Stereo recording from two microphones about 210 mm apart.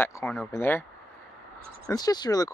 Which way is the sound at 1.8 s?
20° left (ahead or behind).